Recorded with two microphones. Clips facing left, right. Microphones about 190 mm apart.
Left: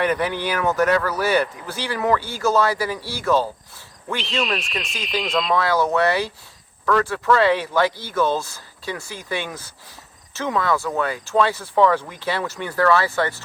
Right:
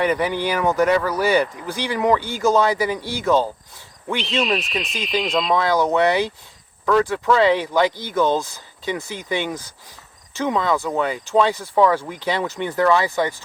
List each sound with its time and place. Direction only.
0.0 s speech: 10° right (ahead or behind)
4.2 s speech: centre (ahead or behind)
5.5 s speech: 15° right (ahead or behind)